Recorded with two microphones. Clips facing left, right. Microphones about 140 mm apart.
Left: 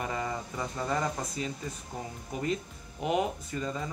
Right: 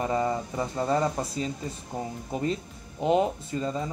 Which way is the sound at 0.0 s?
30° right (ahead or behind).